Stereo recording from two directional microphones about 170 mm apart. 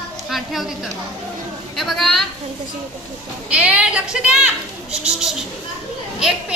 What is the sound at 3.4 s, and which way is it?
A woman's voice, 5° right (ahead or behind).